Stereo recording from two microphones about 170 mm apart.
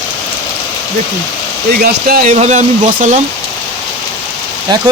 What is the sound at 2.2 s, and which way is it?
Speech, 40° right (ahead or behind).